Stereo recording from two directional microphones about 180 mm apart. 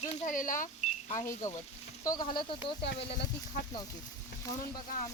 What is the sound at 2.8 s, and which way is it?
Speech, 65° left (ahead or behind).